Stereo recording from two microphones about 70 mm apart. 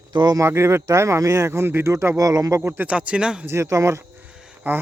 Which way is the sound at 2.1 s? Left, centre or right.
Right.